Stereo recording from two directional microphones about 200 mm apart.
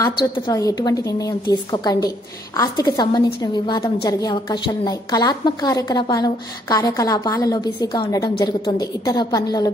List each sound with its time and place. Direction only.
0.0 s a woman's voice: 20° left (ahead or behind)